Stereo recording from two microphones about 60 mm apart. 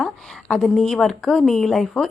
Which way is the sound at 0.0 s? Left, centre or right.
Centre.